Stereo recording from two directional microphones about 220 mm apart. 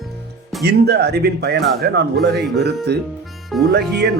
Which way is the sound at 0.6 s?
50° right (ahead or behind).